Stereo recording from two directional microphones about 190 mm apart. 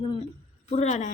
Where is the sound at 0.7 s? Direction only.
35° left (ahead or behind).